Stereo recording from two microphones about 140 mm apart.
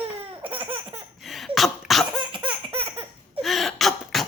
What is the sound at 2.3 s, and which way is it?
Laughter, 40° right (ahead or behind).